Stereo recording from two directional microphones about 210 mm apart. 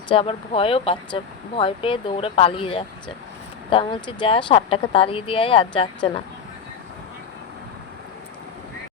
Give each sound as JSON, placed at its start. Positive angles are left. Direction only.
{"t": 0.1, "sound": "speech", "side_deg": 25}